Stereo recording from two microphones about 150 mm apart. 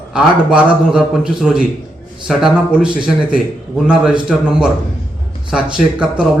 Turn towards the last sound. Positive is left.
turn(degrees=-5)  # may be behind; listen again after turning